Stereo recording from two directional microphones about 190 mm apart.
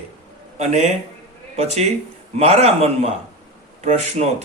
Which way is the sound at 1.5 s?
35° right (ahead or behind).